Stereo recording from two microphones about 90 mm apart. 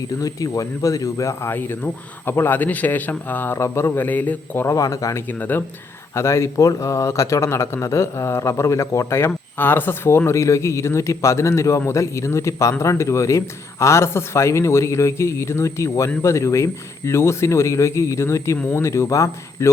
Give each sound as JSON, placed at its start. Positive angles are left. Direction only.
{"t": 0.1, "sound": "speech", "side_deg": 40}
{"t": 4.6, "sound": "a man's voice", "side_deg": 40}
{"t": 5.3, "sound": "speech", "side_deg": 20}
{"t": 6.1, "sound": "a man's voice", "side_deg": 30}